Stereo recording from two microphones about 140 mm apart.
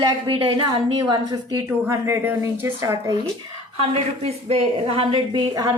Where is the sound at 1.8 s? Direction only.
15° right (ahead or behind).